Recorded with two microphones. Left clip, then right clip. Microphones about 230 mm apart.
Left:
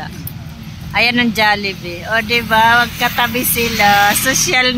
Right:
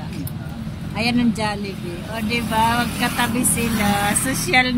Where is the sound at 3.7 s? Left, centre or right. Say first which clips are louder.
Left 11 dB; centre.